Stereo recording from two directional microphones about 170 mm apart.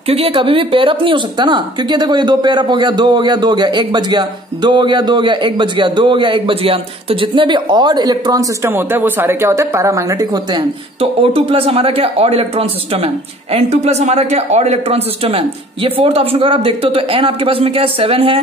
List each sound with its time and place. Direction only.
0.1 s speech: 35° right (ahead or behind)
11.0 s speech: 35° right (ahead or behind)